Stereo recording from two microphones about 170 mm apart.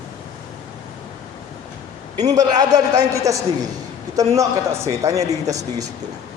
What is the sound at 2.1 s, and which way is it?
Speech, 45° right (ahead or behind).